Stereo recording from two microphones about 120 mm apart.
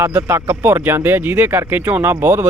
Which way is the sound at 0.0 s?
15° right (ahead or behind).